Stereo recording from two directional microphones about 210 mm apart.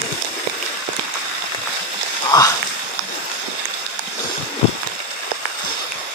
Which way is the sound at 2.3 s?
20° left (ahead or behind).